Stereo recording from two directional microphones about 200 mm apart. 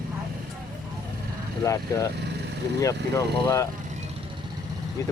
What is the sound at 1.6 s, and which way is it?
Speech, 15° left (ahead or behind).